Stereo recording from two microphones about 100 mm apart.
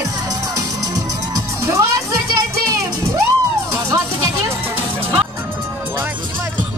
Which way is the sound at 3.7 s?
30° right (ahead or behind).